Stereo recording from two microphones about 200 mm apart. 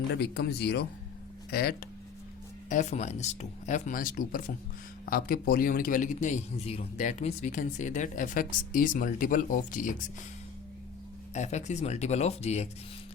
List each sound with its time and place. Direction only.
0.1 s speech: 55° left (ahead or behind)
2.6 s a man's voice: 35° left (ahead or behind)
11.3 s a man's voice: 35° left (ahead or behind)